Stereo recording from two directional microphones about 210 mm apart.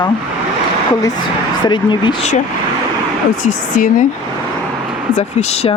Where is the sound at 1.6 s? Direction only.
20° left (ahead or behind).